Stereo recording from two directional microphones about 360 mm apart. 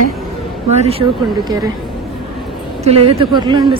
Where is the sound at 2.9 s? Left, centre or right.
Centre.